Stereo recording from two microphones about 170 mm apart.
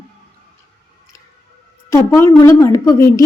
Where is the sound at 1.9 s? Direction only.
15° left (ahead or behind).